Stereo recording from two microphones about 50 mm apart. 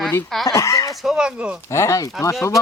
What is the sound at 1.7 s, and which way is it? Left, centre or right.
Speech, left.